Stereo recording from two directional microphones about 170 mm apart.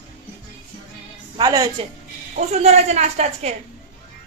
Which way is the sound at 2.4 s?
40° right (ahead or behind).